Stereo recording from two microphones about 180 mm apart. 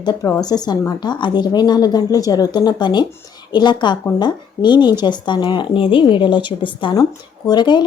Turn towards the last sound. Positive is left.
turn(degrees=25)  # may be behind; listen again after turning